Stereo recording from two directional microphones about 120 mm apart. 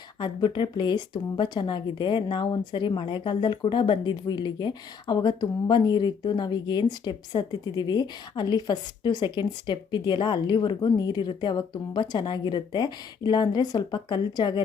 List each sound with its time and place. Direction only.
0.2 s speech: 40° left (ahead or behind)